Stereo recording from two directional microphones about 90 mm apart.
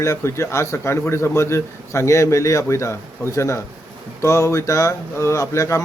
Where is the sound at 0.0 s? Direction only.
30° left (ahead or behind).